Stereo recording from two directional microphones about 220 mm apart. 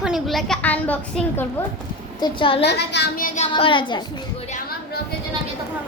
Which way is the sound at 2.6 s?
50° left (ahead or behind).